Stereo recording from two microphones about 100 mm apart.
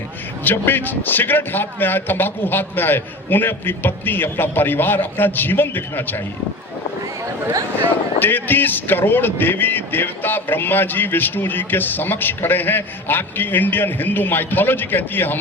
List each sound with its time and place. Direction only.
0.4 s speech: 20° left (ahead or behind)
8.2 s speech: 20° left (ahead or behind)